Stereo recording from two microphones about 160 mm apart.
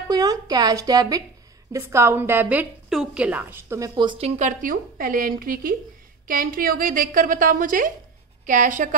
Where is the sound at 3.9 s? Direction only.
30° right (ahead or behind).